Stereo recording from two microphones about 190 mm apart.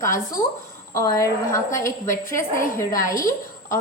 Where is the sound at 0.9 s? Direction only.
15° left (ahead or behind).